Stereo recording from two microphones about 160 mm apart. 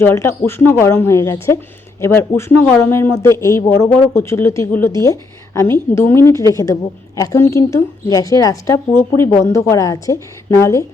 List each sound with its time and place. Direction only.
0.0 s a woman's voice: 15° left (ahead or behind)